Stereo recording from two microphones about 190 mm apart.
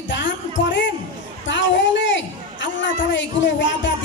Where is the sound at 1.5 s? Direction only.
70° left (ahead or behind).